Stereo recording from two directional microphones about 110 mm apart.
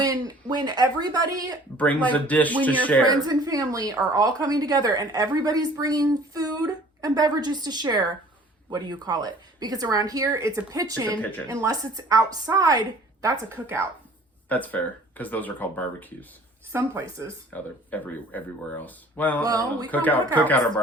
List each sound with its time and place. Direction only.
0.0 s a woman's voice: 35° right (ahead or behind)
1.7 s speech: 15° left (ahead or behind)
3.1 s a woman's voice: 35° right (ahead or behind)
14.5 s speech: 15° left (ahead or behind)
16.7 s speech: 30° right (ahead or behind)
17.5 s speech: 15° left (ahead or behind)
19.5 s a woman's voice: 35° right (ahead or behind)
19.9 s speech: 15° left (ahead or behind)